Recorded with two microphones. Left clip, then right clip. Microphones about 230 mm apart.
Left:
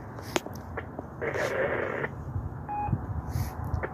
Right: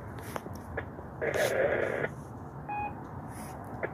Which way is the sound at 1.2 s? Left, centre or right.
Centre.